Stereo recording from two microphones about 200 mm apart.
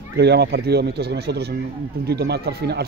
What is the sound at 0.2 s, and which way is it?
Speech, 55° right (ahead or behind).